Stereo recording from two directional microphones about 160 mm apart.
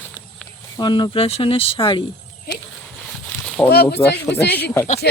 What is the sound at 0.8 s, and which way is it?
Speech, 25° left (ahead or behind).